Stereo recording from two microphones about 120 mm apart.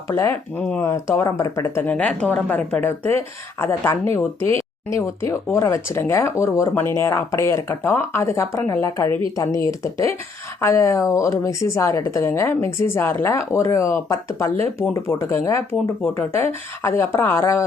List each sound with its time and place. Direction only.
0.1 s a woman's voice: 20° left (ahead or behind)